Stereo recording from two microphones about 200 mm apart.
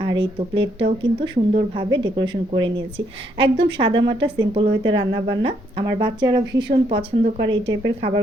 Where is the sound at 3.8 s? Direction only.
25° right (ahead or behind).